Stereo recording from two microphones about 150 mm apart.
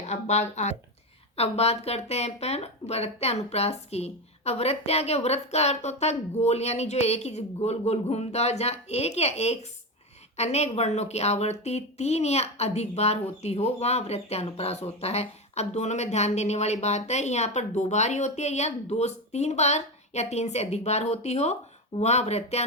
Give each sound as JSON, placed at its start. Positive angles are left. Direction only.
{"t": 0.0, "sound": "speech", "side_deg": 45}